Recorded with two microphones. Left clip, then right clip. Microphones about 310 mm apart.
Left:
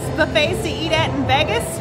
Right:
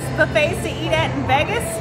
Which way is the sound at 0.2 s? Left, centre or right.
Centre.